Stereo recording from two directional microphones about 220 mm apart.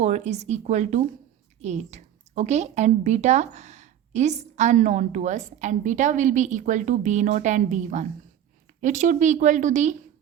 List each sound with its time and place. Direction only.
0.0 s a woman's voice: 30° right (ahead or behind)